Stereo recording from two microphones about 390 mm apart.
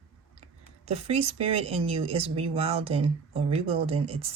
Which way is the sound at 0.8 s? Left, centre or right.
Centre.